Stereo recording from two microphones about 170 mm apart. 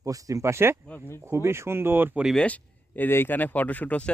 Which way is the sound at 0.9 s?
10° left (ahead or behind).